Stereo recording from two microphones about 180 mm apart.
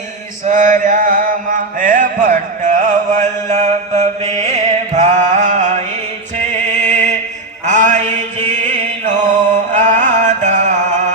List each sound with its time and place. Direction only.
0.4 s mantra: 45° right (ahead or behind)
6.4 s music: 40° right (ahead or behind)
7.6 s mantra: 40° right (ahead or behind)
9.7 s music: 45° right (ahead or behind)